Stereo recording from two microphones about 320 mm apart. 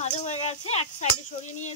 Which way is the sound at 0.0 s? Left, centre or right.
Left.